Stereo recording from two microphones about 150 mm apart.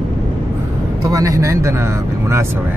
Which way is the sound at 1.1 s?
25° right (ahead or behind).